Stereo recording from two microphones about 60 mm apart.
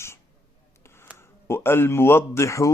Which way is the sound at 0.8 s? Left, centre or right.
Left.